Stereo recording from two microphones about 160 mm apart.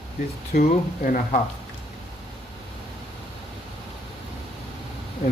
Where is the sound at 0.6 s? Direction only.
55° left (ahead or behind).